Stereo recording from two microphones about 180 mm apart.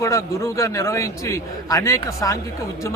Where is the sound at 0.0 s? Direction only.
15° left (ahead or behind).